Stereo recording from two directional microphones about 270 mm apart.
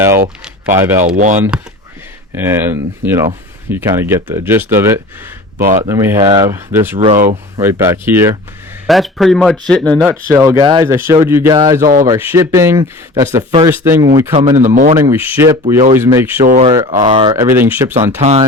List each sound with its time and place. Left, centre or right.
0.0 s a sound: centre
0.8 s speech: centre
2.3 s speech: centre
5.5 s speech: right
5.8 s speech: centre
10.2 s speech: centre
16.5 s speech: right; by 17.9 s centre
18.2 s speech: right